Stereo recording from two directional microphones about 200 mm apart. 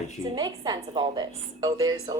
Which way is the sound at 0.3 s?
20° right (ahead or behind).